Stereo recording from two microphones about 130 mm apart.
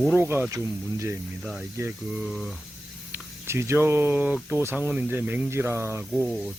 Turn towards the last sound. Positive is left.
turn(degrees=-15)  # may be behind; listen again after turning